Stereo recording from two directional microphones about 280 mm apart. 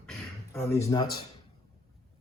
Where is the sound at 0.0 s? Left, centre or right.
Centre.